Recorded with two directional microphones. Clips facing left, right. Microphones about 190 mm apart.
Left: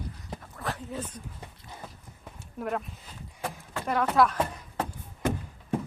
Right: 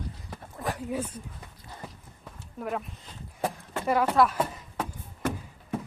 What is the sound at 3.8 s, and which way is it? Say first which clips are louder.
Speech: right 1 dB; 5° right (ahead or behind).